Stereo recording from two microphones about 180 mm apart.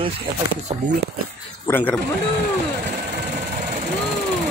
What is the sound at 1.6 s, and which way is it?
Speech, 10° left (ahead or behind).